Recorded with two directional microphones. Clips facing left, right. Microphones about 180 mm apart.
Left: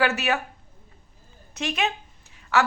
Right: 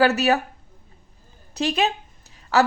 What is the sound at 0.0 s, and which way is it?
Speech, 40° right (ahead or behind).